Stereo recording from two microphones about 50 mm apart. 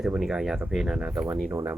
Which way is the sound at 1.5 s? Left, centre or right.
Right.